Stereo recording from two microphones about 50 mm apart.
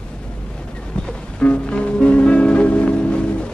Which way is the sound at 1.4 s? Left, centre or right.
Centre.